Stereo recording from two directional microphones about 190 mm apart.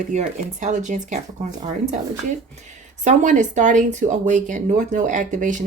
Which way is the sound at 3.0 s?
40° right (ahead or behind).